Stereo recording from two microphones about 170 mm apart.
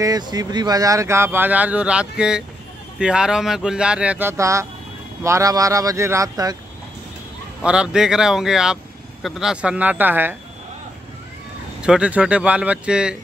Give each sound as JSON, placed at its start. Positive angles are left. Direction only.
{"t": 0.0, "sound": "speech", "side_deg": -25}
{"t": 7.6, "sound": "speech", "side_deg": -5}
{"t": 11.8, "sound": "speech", "side_deg": -5}